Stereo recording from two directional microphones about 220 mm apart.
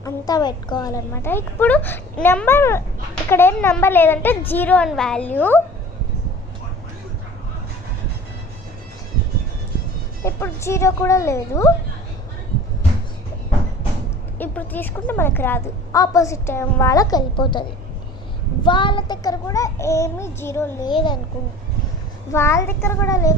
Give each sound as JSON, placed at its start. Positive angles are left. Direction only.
{"t": 0.0, "sound": "a woman's voice", "side_deg": 15}
{"t": 10.2, "sound": "a woman's voice", "side_deg": 10}
{"t": 14.3, "sound": "a woman's voice", "side_deg": 10}
{"t": 22.3, "sound": "a woman's voice", "side_deg": 10}